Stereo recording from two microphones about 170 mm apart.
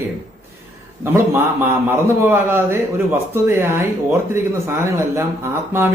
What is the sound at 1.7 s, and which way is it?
Speech, 15° right (ahead or behind).